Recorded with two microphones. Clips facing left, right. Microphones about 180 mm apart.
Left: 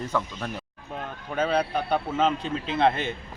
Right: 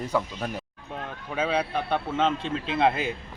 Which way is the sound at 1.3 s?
5° right (ahead or behind).